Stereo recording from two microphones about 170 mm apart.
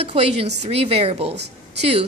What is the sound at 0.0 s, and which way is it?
Speech, 35° right (ahead or behind).